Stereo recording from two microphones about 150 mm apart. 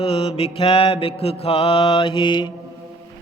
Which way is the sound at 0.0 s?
40° left (ahead or behind).